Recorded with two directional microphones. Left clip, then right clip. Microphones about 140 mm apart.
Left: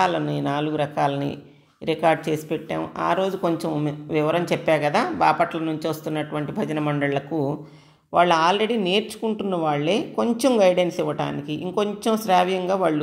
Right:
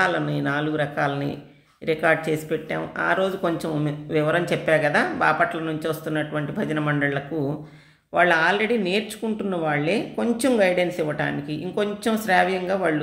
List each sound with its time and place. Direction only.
0.0 s speech: 25° left (ahead or behind)